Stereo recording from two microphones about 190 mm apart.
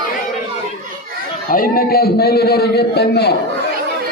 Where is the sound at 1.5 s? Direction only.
50° left (ahead or behind).